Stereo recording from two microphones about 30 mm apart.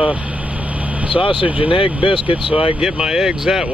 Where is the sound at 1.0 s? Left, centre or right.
Right.